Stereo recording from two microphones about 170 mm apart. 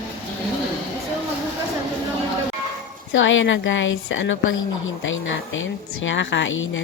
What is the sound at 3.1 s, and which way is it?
A woman's voice, 90° left.